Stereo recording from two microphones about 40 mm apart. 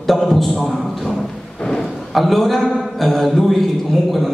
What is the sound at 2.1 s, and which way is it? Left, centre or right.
A man's voice, centre.